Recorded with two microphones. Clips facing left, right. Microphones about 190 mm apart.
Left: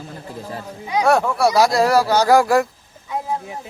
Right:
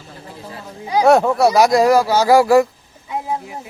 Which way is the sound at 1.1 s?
20° right (ahead or behind).